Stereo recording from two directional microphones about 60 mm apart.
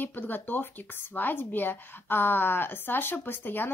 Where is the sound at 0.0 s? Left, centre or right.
Left.